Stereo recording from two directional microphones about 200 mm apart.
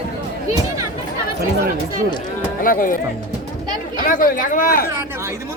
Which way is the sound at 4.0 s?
40° left (ahead or behind).